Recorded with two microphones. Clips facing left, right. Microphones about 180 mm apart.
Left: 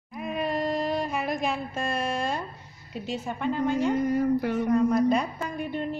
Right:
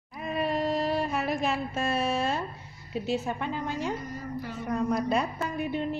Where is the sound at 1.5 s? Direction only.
5° right (ahead or behind).